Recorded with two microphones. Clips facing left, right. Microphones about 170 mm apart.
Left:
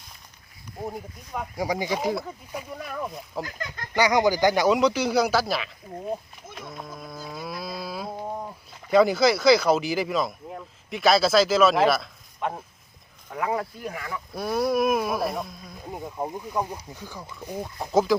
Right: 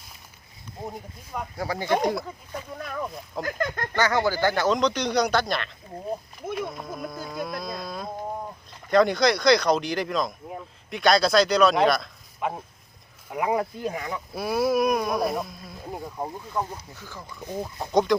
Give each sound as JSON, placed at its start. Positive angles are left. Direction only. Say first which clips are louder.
{"t": 0.9, "sound": "speech", "louder": "left 2 dB", "side_deg": 0}
{"t": 1.5, "sound": "speech", "louder": "left 4 dB", "side_deg": 15}
{"t": 2.0, "sound": "speech", "louder": "right 1 dB", "side_deg": 5}
{"t": 3.4, "sound": "speech", "louder": "right 8 dB", "side_deg": -55}
{"t": 3.9, "sound": "speech", "louder": "left 3 dB", "side_deg": 15}
{"t": 6.7, "sound": "livestock", "louder": "right 4 dB", "side_deg": 0}
{"t": 8.9, "sound": "speech", "louder": "left 1 dB", "side_deg": 5}
{"t": 13.3, "sound": "speech", "louder": "right 2 dB", "side_deg": -15}
{"t": 14.3, "sound": "speech", "louder": "right 1 dB", "side_deg": -5}
{"t": 17.6, "sound": "speech", "louder": "even", "side_deg": 0}